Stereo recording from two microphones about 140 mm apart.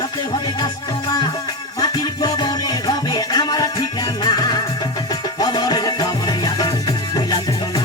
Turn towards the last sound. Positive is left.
turn(degrees=30)  # may be behind; listen again after turning